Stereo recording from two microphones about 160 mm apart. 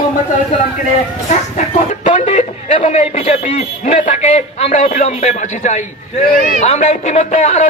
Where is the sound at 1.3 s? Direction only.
45° left (ahead or behind).